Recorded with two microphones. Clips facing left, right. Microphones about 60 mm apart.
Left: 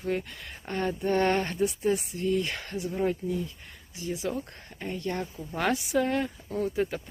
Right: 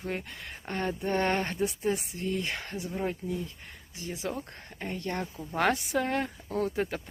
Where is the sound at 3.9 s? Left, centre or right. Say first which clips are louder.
Left 3 dB; right.